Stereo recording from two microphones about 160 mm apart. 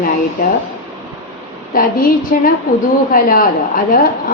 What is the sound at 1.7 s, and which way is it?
A woman's voice, 60° left (ahead or behind).